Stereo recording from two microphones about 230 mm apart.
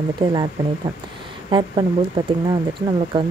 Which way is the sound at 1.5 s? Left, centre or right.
Right.